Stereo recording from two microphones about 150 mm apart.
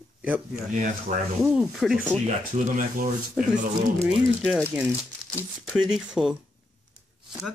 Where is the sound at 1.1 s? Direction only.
55° right (ahead or behind).